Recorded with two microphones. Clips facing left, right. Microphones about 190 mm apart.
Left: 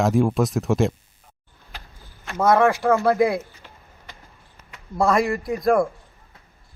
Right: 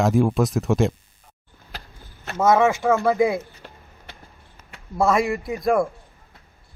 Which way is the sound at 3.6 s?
45° right (ahead or behind).